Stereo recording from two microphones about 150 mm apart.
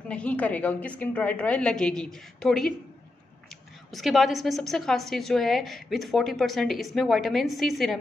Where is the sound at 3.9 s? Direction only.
Centre (ahead or behind).